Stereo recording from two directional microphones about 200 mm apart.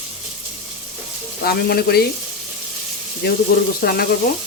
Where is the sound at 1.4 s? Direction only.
50° left (ahead or behind).